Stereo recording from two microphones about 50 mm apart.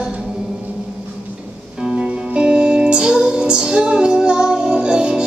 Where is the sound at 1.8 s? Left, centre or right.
Centre.